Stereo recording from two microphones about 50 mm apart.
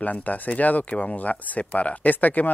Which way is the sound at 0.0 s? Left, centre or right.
Left.